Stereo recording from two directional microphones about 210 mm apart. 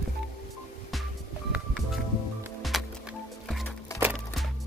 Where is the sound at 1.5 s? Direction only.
Centre (ahead or behind).